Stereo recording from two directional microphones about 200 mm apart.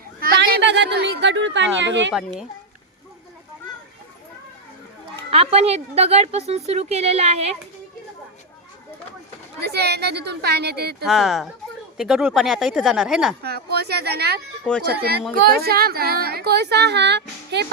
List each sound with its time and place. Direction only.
0.2 s a sound: 50° right (ahead or behind); by 2.1 s 65° right (ahead or behind)
2.1 s speech: centre (ahead or behind)
5.3 s a woman's voice: 30° right (ahead or behind)
9.6 s a woman's voice: 55° right (ahead or behind)
11.0 s speech: centre (ahead or behind)
13.4 s speech: 55° right (ahead or behind)
14.7 s speech: 5° left (ahead or behind)
15.5 s speech: 50° right (ahead or behind)